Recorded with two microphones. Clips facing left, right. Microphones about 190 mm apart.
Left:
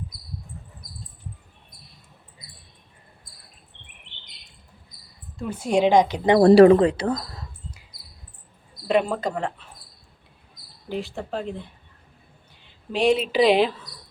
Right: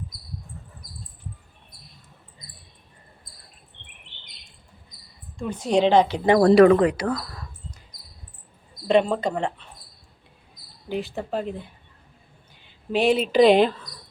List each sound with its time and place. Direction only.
5.4 s speech: 10° left (ahead or behind); by 7.4 s 30° left (ahead or behind)
8.9 s speech: 5° left (ahead or behind)
10.8 s speech: centre (ahead or behind)
12.9 s speech: centre (ahead or behind)